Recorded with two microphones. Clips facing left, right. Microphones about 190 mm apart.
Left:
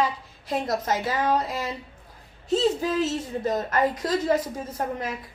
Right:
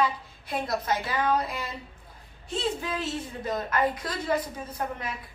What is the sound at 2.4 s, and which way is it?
Speech, 40° left (ahead or behind).